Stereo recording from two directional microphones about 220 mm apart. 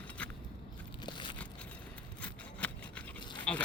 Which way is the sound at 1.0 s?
20° left (ahead or behind).